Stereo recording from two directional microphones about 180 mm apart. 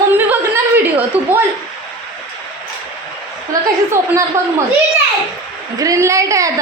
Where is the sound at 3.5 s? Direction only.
20° right (ahead or behind).